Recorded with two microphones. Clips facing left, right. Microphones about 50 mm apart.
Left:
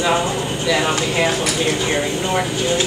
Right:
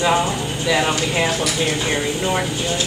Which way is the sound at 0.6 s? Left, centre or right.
Centre.